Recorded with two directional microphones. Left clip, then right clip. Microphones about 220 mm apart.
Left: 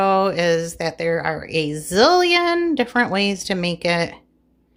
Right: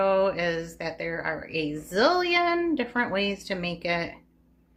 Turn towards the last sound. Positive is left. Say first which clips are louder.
# left 8 dB
turn(degrees=55)  # may be behind; listen again after turning